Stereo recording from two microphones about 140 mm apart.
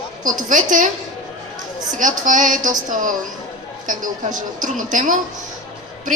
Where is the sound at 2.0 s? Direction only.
70° right (ahead or behind).